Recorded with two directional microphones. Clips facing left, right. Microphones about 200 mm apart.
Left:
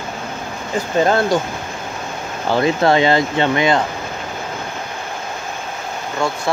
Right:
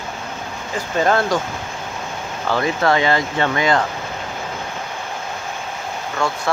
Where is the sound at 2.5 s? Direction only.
25° left (ahead or behind).